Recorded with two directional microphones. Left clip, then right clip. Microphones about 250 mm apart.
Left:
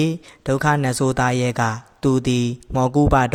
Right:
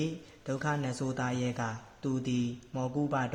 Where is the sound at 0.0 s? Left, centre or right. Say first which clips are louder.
Left 14 dB; left.